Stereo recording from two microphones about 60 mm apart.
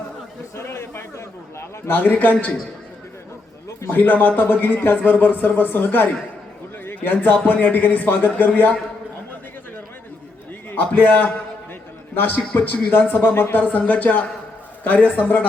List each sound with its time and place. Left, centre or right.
0.5 s a sound: left
1.9 s a man's voice: left
3.8 s speech: left
10.7 s a man's voice: left